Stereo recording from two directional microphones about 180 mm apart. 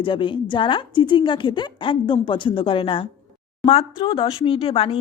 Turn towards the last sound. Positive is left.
turn(degrees=30)  # may be behind; listen again after turning